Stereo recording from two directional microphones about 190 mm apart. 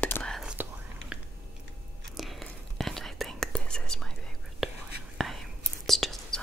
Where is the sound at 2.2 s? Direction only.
Centre (ahead or behind).